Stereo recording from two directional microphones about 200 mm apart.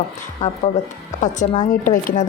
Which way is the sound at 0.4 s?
40° left (ahead or behind).